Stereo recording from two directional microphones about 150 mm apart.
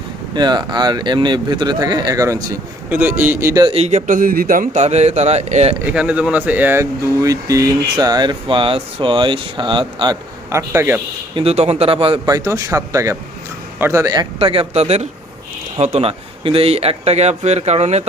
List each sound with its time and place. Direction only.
0.3 s speech: 30° right (ahead or behind)
3.6 s a man's voice: 40° right (ahead or behind)
5.8 s speech: 10° right (ahead or behind); by 10.2 s 30° right (ahead or behind)
10.5 s a man's voice: 15° right (ahead or behind)
11.3 s a man's voice: 45° right (ahead or behind)
12.2 s speech: 20° right (ahead or behind)
14.3 s a man's voice: 35° right (ahead or behind)